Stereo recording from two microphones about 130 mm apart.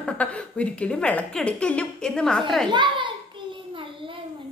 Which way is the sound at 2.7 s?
35° right (ahead or behind).